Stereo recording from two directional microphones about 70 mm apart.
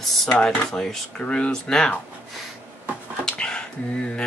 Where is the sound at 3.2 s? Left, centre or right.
Centre.